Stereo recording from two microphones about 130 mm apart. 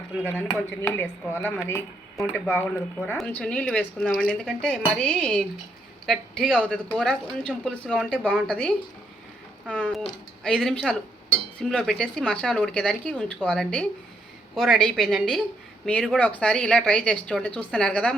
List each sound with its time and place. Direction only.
0.2 s a woman's voice: 10° left (ahead or behind)
3.2 s a woman's voice: 5° left (ahead or behind)
8.2 s speech: 10° right (ahead or behind)
8.4 s a woman's voice: 5° left (ahead or behind)